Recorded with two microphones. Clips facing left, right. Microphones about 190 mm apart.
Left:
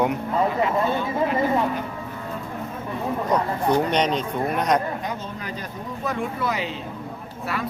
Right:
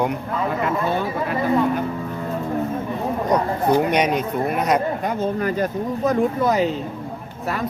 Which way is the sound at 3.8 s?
10° right (ahead or behind).